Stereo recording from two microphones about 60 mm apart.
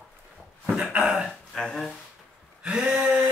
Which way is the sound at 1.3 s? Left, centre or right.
Centre.